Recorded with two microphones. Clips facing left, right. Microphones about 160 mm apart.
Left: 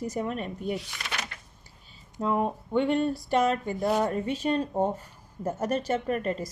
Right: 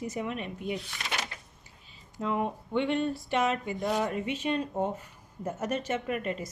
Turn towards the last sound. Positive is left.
turn(degrees=40)  # may be behind; listen again after turning